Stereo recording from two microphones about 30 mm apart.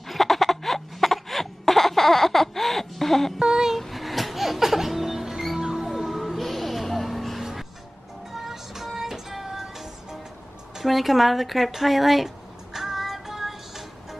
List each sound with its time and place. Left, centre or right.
0.1 s a sound: centre
3.3 s a sound: centre
3.8 s music: centre
5.9 s music: centre
10.8 s a woman's voice: centre
12.7 s music: centre